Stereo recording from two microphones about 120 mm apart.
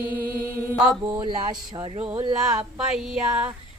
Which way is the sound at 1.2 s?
35° right (ahead or behind).